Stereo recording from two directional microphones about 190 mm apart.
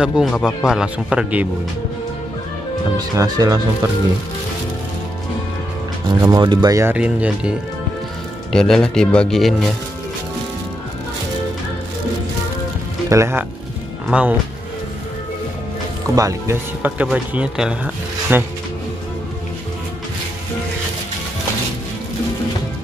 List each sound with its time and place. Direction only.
0.0 s speech: centre (ahead or behind)
3.0 s speech: 20° right (ahead or behind)
6.0 s speech: 20° right (ahead or behind); by 9.7 s centre (ahead or behind)
13.1 s speech: 15° right (ahead or behind)
16.2 s speech: 15° right (ahead or behind)